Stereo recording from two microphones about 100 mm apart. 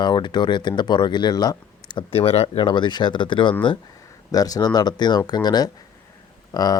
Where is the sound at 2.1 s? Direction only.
90° left.